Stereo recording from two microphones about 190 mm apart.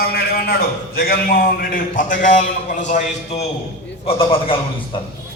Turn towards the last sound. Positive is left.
turn(degrees=30)  # may be behind; listen again after turning